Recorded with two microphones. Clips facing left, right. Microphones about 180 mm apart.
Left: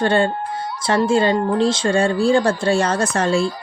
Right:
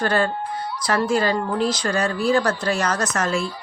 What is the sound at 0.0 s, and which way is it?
Speech, 25° left (ahead or behind).